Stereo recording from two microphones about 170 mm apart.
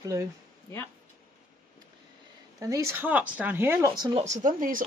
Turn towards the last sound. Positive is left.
turn(degrees=-50)  # may be behind; listen again after turning